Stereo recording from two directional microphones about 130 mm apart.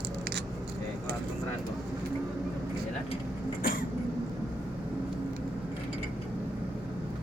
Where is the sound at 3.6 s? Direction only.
90° left.